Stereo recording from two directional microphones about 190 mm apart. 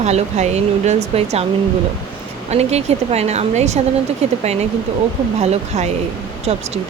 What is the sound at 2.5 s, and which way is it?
Speech, 35° right (ahead or behind).